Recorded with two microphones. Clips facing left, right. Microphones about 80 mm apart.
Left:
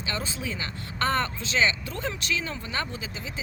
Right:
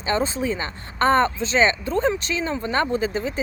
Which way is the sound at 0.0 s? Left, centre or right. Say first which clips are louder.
Right 10 dB; right.